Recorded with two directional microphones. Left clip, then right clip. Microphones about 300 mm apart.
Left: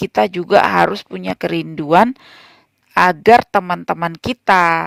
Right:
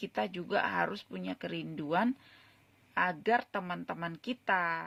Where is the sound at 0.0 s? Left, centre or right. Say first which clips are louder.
Left 19 dB; left.